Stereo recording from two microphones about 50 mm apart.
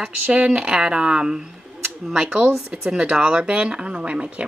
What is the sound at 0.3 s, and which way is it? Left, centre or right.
Speech, right.